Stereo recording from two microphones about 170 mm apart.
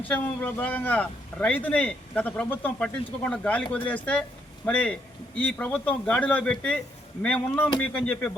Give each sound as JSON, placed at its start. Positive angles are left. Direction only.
{"t": 0.0, "sound": "a man's voice", "side_deg": 10}